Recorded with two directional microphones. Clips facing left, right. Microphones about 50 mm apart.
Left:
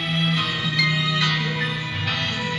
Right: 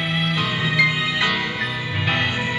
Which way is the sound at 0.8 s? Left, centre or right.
Centre.